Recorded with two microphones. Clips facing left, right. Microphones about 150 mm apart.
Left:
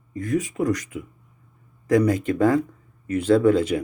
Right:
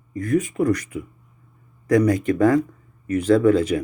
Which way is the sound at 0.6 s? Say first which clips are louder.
Right 3 dB; 20° left (ahead or behind).